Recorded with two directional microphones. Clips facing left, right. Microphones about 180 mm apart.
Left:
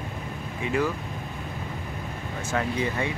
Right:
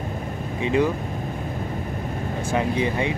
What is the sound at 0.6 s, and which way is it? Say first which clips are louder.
Speech: right 5 dB; 20° right (ahead or behind).